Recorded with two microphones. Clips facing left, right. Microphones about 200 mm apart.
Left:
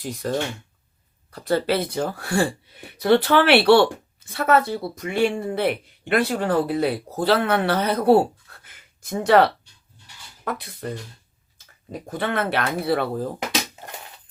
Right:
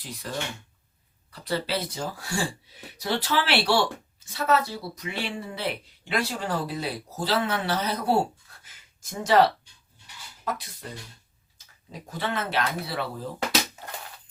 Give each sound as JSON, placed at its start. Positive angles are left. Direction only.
{"t": 0.0, "sound": "speech", "side_deg": 45}